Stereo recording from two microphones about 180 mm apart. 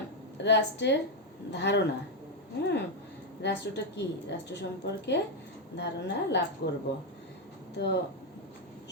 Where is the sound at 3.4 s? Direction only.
70° left (ahead or behind).